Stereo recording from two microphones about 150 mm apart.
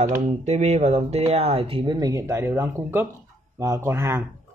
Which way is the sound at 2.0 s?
20° right (ahead or behind).